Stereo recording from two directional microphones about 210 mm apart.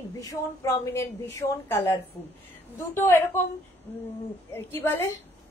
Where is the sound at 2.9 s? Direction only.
10° left (ahead or behind).